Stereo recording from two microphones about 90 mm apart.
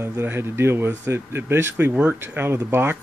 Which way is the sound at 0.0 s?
25° right (ahead or behind).